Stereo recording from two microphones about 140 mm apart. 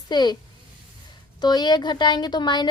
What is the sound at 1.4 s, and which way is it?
A child's voice, 30° left (ahead or behind).